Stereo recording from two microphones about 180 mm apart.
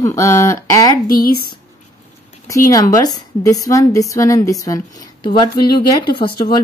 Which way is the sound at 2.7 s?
20° left (ahead or behind).